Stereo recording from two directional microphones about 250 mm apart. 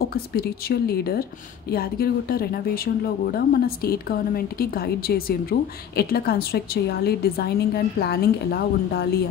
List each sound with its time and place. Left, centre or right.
0.1 s speech: left